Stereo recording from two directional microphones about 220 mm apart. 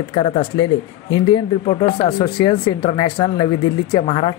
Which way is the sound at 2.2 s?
20° left (ahead or behind).